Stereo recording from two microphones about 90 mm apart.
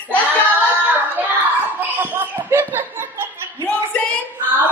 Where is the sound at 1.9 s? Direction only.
20° right (ahead or behind).